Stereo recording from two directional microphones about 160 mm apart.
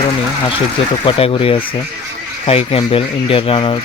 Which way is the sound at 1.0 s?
35° left (ahead or behind).